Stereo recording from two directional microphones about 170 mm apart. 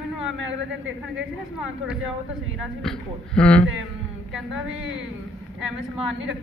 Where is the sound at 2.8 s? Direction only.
5° left (ahead or behind).